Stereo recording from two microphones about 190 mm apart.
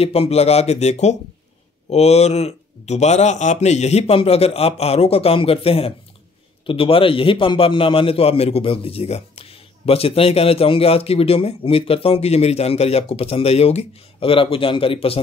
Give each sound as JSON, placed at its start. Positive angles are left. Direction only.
{"t": 0.0, "sound": "a man's voice", "side_deg": 30}